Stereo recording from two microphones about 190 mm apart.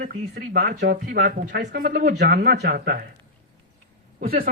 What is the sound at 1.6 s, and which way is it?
Speech, 50° right (ahead or behind).